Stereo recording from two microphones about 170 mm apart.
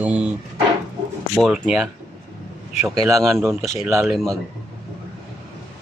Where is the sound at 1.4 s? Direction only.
Centre (ahead or behind).